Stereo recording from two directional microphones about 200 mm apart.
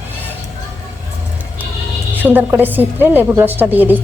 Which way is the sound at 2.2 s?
10° right (ahead or behind).